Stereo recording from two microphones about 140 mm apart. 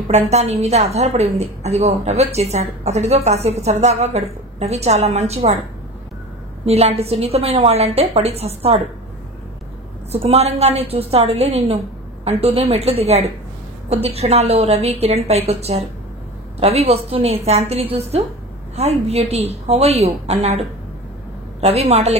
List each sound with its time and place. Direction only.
0.1 s a woman's voice: 50° right (ahead or behind)
6.6 s a woman's voice: 50° right (ahead or behind)
10.1 s a woman's voice: 50° right (ahead or behind)